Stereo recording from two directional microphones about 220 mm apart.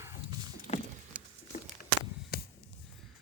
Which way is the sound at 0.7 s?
30° left (ahead or behind).